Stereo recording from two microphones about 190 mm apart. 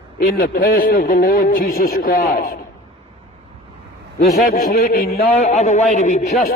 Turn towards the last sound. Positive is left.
turn(degrees=40)  # may be behind; listen again after turning